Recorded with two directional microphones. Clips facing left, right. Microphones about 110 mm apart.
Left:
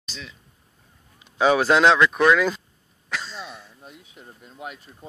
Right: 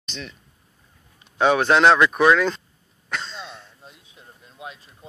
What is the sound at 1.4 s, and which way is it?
Speech, 5° left (ahead or behind).